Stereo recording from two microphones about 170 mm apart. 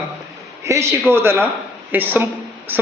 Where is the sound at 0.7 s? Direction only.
15° right (ahead or behind).